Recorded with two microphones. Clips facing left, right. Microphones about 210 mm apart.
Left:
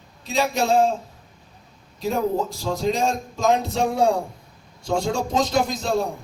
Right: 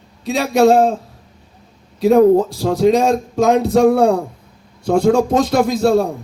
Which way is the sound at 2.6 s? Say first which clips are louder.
Right 9 dB; 60° right (ahead or behind).